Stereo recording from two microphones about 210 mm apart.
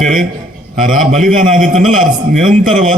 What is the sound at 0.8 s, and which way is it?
A man's voice, 40° right (ahead or behind).